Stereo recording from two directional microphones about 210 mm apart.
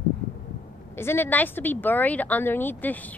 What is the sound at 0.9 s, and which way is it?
Speech, 10° left (ahead or behind).